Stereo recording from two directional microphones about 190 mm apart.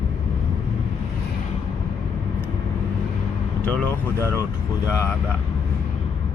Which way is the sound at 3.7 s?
10° left (ahead or behind).